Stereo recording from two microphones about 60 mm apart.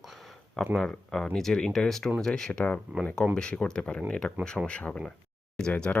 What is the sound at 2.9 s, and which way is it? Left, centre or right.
Speech, right.